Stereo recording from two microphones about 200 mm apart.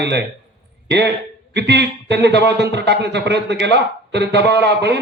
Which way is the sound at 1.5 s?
60° right (ahead or behind).